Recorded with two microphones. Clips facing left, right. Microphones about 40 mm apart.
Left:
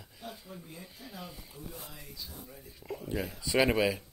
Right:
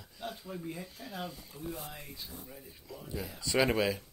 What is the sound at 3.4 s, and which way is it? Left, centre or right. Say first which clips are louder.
Speech: left 1 dB; centre.